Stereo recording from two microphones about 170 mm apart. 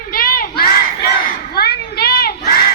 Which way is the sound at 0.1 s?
60° left (ahead or behind).